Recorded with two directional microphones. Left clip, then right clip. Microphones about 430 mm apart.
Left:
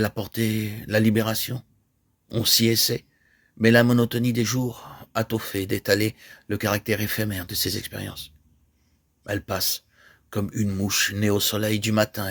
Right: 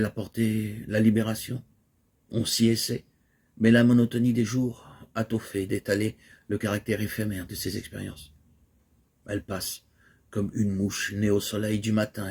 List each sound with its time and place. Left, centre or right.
0.0 s speech: left
9.2 s speech: left